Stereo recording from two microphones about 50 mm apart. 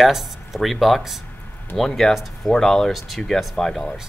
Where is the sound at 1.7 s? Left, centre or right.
Centre.